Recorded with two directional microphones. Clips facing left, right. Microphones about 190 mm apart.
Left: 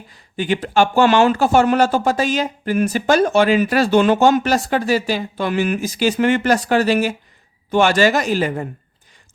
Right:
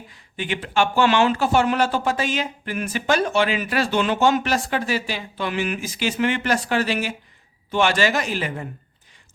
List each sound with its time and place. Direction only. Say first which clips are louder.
0.1 s speech: left 7 dB; 40° left (ahead or behind)